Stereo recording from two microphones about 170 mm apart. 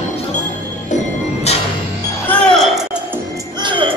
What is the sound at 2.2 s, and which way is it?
Music, 5° left (ahead or behind).